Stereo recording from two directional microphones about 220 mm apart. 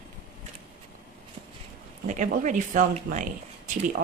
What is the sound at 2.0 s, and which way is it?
Speech, 35° right (ahead or behind).